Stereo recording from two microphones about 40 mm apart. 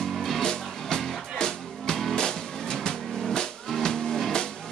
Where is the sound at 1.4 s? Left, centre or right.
Centre.